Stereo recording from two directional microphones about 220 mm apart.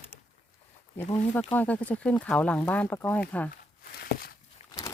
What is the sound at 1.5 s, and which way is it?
Speech, 5° left (ahead or behind).